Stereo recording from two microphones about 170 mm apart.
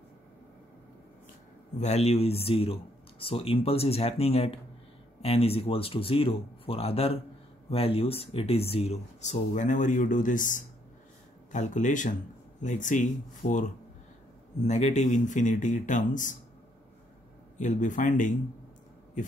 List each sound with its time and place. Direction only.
1.8 s speech: 40° left (ahead or behind)
11.5 s speech: 45° left (ahead or behind)
17.6 s speech: 50° left (ahead or behind)